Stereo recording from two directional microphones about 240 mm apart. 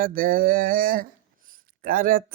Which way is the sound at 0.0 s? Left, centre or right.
Right.